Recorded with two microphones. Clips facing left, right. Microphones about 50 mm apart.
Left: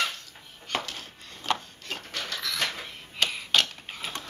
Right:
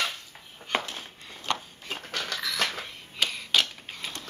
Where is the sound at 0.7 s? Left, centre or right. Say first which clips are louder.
Right 2 dB; centre.